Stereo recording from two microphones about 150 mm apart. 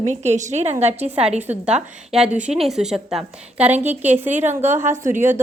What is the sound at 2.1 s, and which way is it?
A woman's voice, 5° right (ahead or behind).